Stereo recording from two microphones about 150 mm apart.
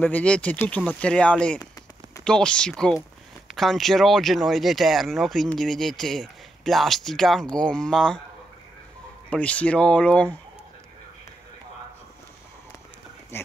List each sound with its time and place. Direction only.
0.0 s speech: 10° left (ahead or behind)
9.3 s speech: 10° left (ahead or behind)
13.3 s speech: 15° left (ahead or behind)